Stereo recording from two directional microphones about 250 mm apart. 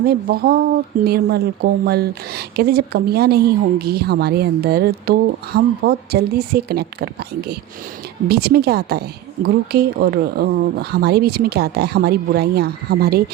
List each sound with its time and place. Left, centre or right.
0.0 s speech: right